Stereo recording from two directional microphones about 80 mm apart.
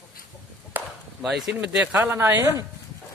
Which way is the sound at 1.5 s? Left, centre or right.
Centre.